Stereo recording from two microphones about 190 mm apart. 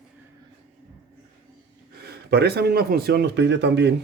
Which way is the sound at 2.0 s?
55° right (ahead or behind).